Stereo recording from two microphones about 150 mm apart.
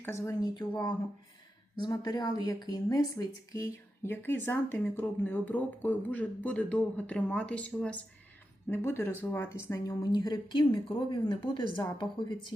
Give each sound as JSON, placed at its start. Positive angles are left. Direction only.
{"t": 0.0, "sound": "speech", "side_deg": 20}
{"t": 1.8, "sound": "speech", "side_deg": 25}